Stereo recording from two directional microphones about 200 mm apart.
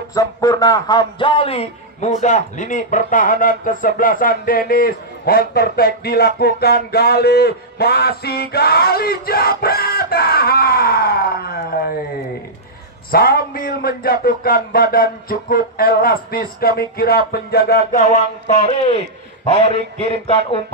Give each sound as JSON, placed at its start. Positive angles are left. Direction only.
{"t": 0.1, "sound": "speech", "side_deg": 15}
{"t": 13.1, "sound": "speech", "side_deg": 50}
{"t": 18.0, "sound": "a man's voice", "side_deg": 35}